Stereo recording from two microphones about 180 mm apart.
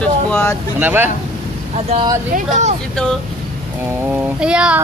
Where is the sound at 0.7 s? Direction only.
10° right (ahead or behind).